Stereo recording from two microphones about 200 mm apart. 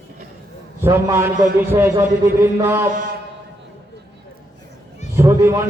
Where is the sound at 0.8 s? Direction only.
15° right (ahead or behind).